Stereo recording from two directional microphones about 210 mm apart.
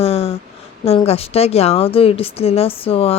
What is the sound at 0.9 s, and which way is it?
A woman's voice, 30° left (ahead or behind).